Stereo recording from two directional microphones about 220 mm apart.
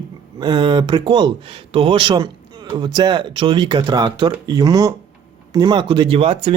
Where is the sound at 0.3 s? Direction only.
20° right (ahead or behind).